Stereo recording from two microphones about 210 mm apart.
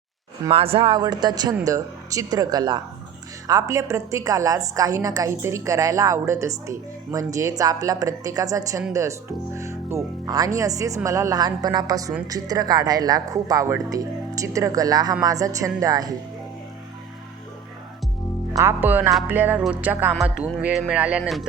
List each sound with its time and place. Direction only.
0.5 s a woman's voice: 25° right (ahead or behind)
18.5 s a woman's voice: 10° right (ahead or behind)